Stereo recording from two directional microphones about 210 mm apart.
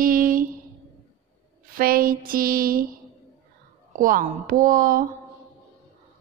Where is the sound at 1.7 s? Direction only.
45° right (ahead or behind).